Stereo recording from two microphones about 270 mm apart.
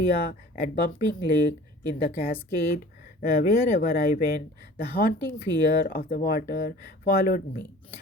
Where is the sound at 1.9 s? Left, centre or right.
Left.